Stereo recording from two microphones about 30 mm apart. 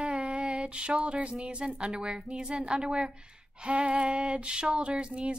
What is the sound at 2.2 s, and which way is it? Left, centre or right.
Speech, right.